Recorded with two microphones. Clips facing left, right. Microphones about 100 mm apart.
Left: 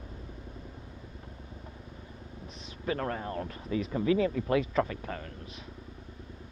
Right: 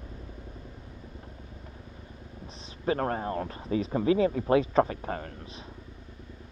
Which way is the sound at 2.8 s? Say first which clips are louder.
Right 4 dB; 35° right (ahead or behind).